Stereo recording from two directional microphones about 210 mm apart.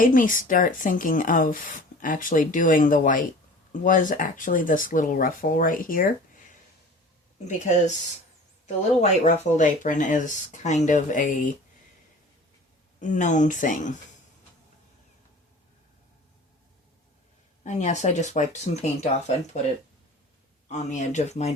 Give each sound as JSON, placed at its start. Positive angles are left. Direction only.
{"t": 0.0, "sound": "speech", "side_deg": 40}
{"t": 7.4, "sound": "speech", "side_deg": 35}
{"t": 13.0, "sound": "speech", "side_deg": 35}
{"t": 17.6, "sound": "speech", "side_deg": 35}
{"t": 20.7, "sound": "speech", "side_deg": 35}